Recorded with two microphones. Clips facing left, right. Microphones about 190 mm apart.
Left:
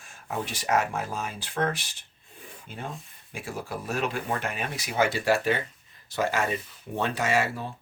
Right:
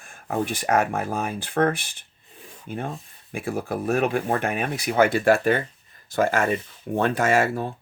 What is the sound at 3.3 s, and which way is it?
Speech, 55° right (ahead or behind).